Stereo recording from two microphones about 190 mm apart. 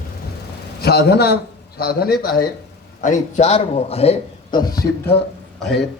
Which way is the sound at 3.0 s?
40° left (ahead or behind).